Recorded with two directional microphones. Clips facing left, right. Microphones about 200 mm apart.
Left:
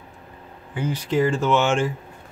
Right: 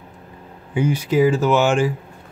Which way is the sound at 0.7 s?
10° right (ahead or behind).